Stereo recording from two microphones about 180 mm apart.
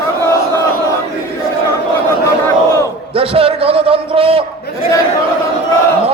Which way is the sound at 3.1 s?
30° right (ahead or behind).